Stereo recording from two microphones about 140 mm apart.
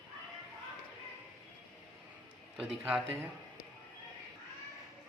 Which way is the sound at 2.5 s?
5° right (ahead or behind).